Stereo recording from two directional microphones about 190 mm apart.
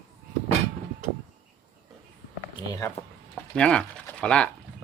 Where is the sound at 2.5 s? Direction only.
15° left (ahead or behind).